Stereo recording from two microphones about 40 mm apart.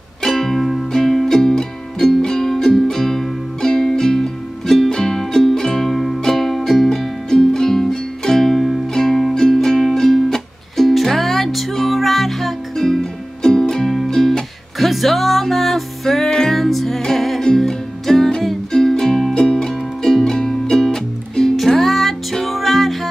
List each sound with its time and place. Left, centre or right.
0.2 s music: centre